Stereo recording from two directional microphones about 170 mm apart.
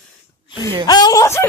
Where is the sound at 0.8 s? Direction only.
20° left (ahead or behind).